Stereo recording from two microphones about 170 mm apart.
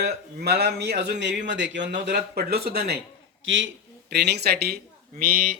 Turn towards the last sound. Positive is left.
turn(degrees=-55)  # may be behind; listen again after turning